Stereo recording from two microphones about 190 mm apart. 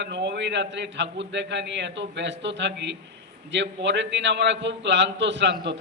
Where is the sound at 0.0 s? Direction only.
65° right (ahead or behind).